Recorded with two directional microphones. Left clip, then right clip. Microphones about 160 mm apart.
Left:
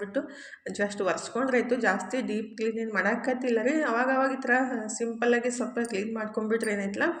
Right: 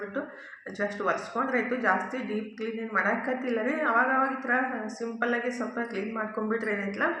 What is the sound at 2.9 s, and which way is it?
Speech, 45° left (ahead or behind).